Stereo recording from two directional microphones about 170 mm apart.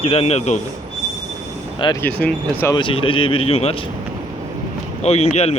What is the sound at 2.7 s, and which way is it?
A man's voice, 30° left (ahead or behind).